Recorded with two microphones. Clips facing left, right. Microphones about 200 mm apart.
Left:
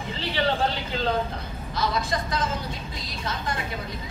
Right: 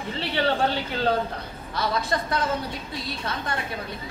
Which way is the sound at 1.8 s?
60° right (ahead or behind).